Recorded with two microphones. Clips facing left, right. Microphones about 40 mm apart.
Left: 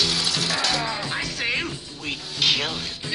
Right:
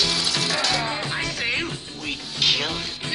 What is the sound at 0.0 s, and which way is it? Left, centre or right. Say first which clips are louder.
Music: right 1 dB; centre.